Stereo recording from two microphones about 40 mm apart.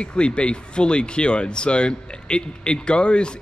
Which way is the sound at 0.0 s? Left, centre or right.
Left.